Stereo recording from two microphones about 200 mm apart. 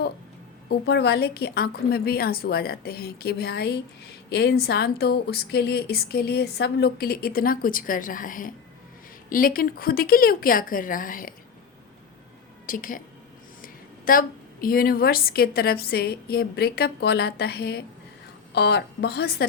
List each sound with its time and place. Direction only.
0.7 s a woman's voice: 55° left (ahead or behind)
12.6 s a woman's voice: 45° left (ahead or behind)